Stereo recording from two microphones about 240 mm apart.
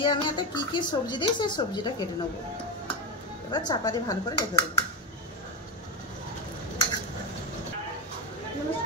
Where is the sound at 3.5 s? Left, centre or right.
Centre.